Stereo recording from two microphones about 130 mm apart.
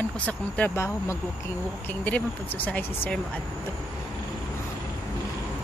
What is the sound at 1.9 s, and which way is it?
Speech, 15° left (ahead or behind).